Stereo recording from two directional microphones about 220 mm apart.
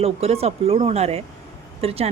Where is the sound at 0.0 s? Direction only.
25° right (ahead or behind).